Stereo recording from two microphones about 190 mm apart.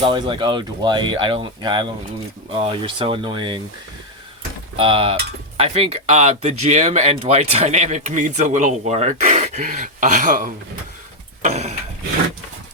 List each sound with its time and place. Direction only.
0.0 s speech: 25° right (ahead or behind)
4.8 s speech: 30° right (ahead or behind)